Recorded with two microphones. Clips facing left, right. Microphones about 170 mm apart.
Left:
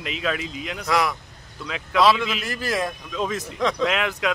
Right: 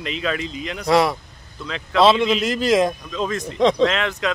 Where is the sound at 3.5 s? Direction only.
25° right (ahead or behind).